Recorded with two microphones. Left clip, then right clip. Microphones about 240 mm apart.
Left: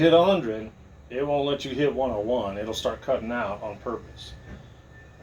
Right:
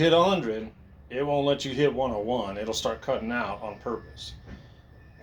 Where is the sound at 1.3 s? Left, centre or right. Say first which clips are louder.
Right 2 dB; centre.